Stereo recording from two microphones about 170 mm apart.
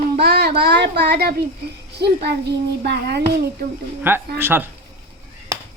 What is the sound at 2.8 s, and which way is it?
Speech, 75° right (ahead or behind).